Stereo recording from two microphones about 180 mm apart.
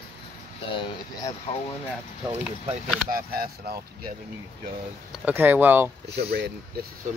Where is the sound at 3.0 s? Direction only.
55° right (ahead or behind).